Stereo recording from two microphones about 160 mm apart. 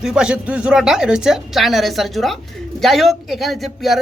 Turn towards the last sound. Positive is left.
turn(degrees=0)  # may be behind; listen again after turning